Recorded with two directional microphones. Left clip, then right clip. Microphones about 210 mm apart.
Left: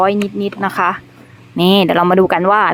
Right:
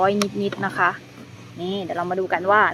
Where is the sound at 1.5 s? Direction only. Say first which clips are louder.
Left 14 dB; 40° left (ahead or behind).